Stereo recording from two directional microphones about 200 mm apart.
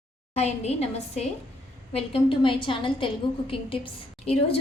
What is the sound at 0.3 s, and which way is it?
A woman's voice, 35° left (ahead or behind).